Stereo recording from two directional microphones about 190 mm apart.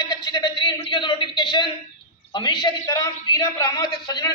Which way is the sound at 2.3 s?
25° left (ahead or behind).